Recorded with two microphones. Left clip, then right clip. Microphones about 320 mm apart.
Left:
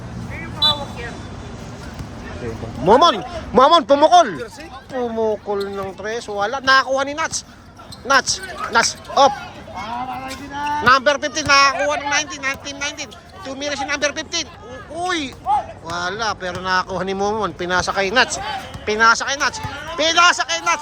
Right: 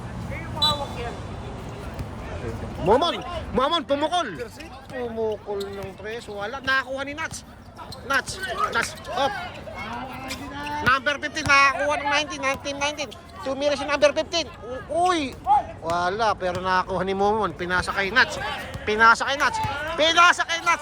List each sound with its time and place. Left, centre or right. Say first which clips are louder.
2.9 s speech: left 8 dB; left
10.5 s a man's voice: left 8 dB; centre